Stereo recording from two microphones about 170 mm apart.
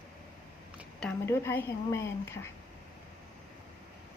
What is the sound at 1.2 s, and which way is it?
A woman's voice, 15° left (ahead or behind).